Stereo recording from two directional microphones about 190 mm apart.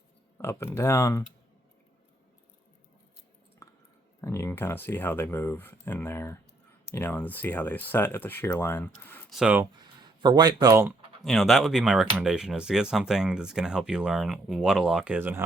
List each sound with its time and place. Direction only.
0.3 s speech: 10° left (ahead or behind)
4.2 s speech: 15° left (ahead or behind)
9.3 s speech: 5° right (ahead or behind)
9.7 s speech: 20° right (ahead or behind)
11.2 s speech: centre (ahead or behind)